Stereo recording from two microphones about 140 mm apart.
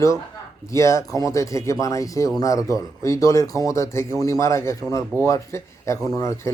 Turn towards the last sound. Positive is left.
turn(degrees=20)  # may be behind; listen again after turning